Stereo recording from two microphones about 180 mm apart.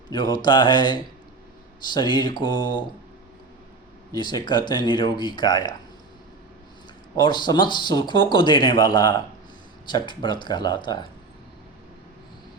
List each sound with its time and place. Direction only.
0.1 s speech: 25° left (ahead or behind)
4.1 s speech: 25° left (ahead or behind)
7.2 s speech: 25° left (ahead or behind)